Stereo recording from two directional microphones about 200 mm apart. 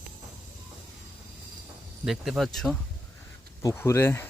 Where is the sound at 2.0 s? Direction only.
Centre (ahead or behind).